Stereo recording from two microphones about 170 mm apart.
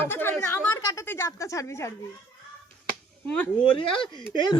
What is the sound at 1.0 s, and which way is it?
Speech, 15° left (ahead or behind).